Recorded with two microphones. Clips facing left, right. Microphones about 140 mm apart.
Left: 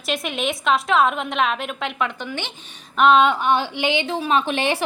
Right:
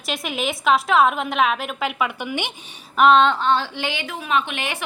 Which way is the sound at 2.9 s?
Centre (ahead or behind).